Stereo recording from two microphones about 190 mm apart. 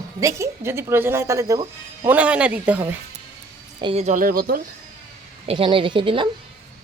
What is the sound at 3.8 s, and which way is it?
Speech, 35° right (ahead or behind).